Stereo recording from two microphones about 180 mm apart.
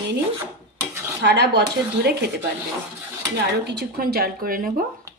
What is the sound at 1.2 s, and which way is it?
Speech, 70° right (ahead or behind).